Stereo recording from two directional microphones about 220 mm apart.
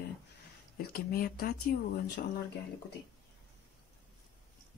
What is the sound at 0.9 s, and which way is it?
Speech, 40° left (ahead or behind).